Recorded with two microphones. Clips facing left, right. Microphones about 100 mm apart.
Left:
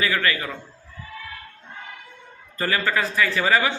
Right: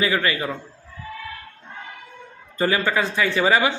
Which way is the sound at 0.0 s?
25° right (ahead or behind).